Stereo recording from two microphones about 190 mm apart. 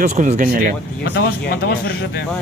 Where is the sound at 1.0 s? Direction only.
60° left (ahead or behind).